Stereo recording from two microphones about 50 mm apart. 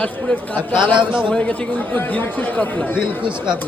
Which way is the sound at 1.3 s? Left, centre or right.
Left.